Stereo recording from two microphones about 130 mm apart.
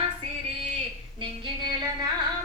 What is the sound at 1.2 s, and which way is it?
Carnatic music, 35° right (ahead or behind).